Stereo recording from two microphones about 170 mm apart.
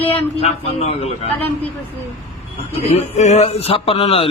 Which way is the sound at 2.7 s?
35° left (ahead or behind).